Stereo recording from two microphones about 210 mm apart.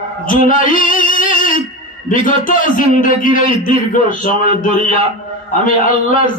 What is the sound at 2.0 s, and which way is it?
A man's voice, 40° left (ahead or behind).